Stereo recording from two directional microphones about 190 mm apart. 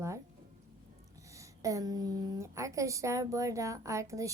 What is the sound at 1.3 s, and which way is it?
A woman's voice, 15° right (ahead or behind).